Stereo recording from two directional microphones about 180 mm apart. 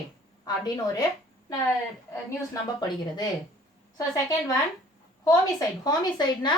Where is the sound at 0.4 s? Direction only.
20° left (ahead or behind).